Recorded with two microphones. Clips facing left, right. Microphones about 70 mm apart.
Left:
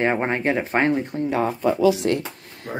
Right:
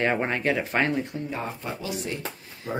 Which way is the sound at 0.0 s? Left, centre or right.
Left.